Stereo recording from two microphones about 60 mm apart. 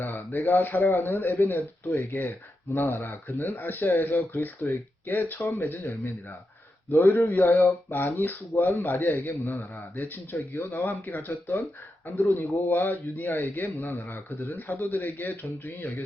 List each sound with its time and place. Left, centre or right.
0.0 s speech: left
5.5 s speech: left
6.9 s speech: left
7.3 s speech: left
9.4 s speech: left
10.5 s speech: left